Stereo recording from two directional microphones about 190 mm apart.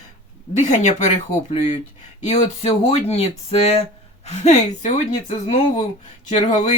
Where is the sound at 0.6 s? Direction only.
40° left (ahead or behind).